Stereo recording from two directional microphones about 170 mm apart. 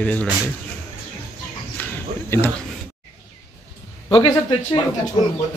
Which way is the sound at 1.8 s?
10° left (ahead or behind).